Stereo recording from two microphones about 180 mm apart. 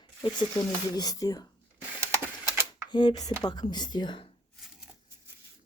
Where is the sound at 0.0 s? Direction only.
25° left (ahead or behind).